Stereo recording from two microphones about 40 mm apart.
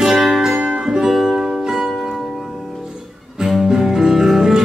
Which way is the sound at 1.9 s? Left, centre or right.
Centre.